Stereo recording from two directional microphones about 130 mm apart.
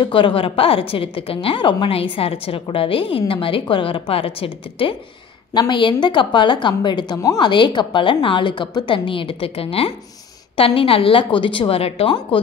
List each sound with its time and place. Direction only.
0.0 s a woman's voice: 40° left (ahead or behind)